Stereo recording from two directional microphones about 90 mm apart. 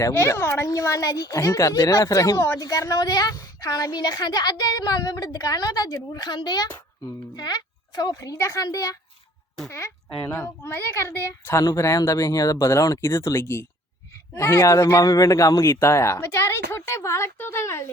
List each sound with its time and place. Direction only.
0.1 s a woman's voice: 30° left (ahead or behind); by 15.8 s 45° left (ahead or behind)
15.8 s a child's voice: 35° left (ahead or behind)